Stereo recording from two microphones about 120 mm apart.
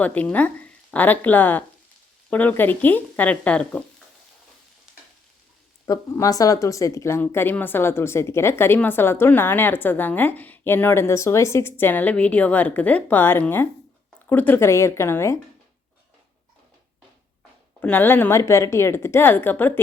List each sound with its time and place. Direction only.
0.0 s a woman's voice: 10° left (ahead or behind)
4.9 s stir: 5° right (ahead or behind)
5.8 s speech: 30° left (ahead or behind)
17.7 s a woman's voice: 15° left (ahead or behind)